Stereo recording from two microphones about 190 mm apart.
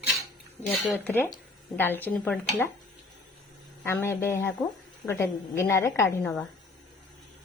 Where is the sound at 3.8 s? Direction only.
10° left (ahead or behind).